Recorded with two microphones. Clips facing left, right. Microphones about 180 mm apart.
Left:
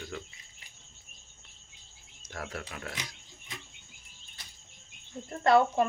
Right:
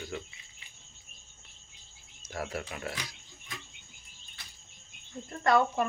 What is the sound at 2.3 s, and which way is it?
Speech, 10° right (ahead or behind).